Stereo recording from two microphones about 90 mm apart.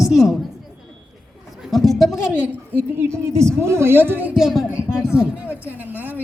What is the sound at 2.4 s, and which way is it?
A woman's voice, 25° right (ahead or behind).